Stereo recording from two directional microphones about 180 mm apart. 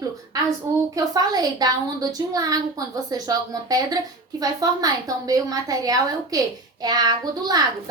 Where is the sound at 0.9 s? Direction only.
20° right (ahead or behind).